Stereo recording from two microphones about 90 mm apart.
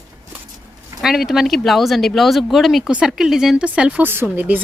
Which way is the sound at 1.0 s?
5° right (ahead or behind).